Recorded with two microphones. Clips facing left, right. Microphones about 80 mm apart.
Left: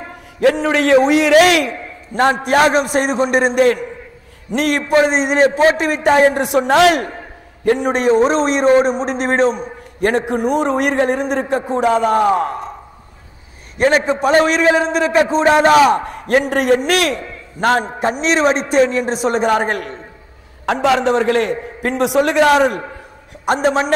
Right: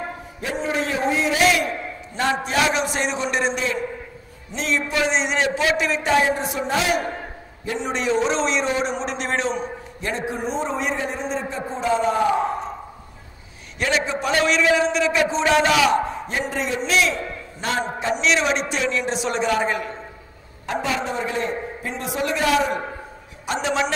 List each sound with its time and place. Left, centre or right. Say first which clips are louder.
0.4 s a man's voice: left 11 dB; left
2.4 s a man's voice: left 8 dB; left
4.9 s a man's voice: left 9 dB; left
7.6 s a man's voice: left 10 dB; left
9.9 s a man's voice: left 11 dB; left
13.7 s a man's voice: left 8 dB; left
16.1 s a man's voice: left 10 dB; left
20.6 s a man's voice: left 10 dB; left
23.4 s a man's voice: left 7 dB; left